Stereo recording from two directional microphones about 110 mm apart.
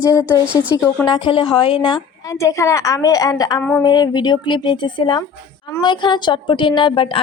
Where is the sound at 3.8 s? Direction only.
40° left (ahead or behind).